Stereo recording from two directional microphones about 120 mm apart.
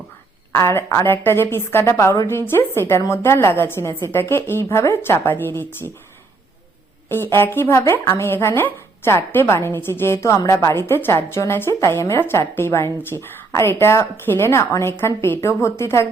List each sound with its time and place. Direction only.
0.5 s speech: 20° left (ahead or behind)
7.1 s speech: 20° left (ahead or behind)